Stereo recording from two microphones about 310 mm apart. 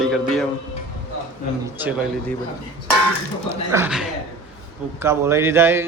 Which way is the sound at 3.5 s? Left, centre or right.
Centre.